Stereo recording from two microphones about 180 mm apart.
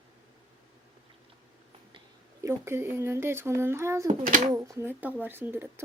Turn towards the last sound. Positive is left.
turn(degrees=-10)  # may be behind; listen again after turning